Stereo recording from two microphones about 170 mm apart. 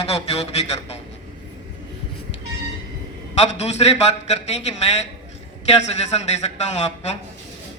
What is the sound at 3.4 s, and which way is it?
Speech, 40° left (ahead or behind).